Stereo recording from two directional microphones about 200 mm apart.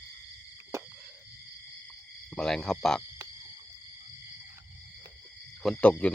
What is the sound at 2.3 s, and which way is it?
Speech, 5° left (ahead or behind).